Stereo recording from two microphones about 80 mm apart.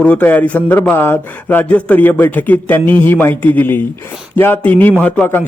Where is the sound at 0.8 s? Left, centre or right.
Left.